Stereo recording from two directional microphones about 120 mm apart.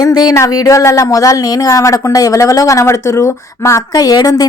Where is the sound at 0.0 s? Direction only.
35° left (ahead or behind).